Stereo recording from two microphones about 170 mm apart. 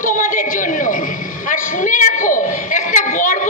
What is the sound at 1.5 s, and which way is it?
Speech, 50° left (ahead or behind).